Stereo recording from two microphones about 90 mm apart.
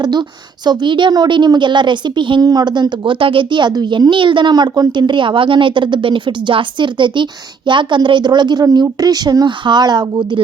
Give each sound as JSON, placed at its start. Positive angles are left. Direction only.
{"t": 0.0, "sound": "a woman's voice", "side_deg": -50}
{"t": 2.4, "sound": "a woman's voice", "side_deg": -45}